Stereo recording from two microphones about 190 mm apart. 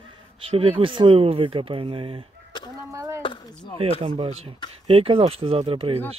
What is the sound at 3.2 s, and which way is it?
Speech, 25° left (ahead or behind).